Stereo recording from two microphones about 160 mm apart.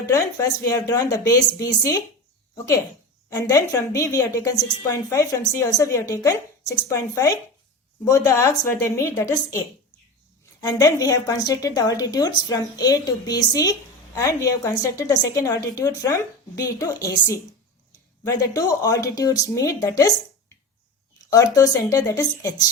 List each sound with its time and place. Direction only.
0.0 s a woman's voice: 20° left (ahead or behind)
3.2 s a woman's voice: 20° left (ahead or behind)
21.2 s a woman's voice: 20° left (ahead or behind)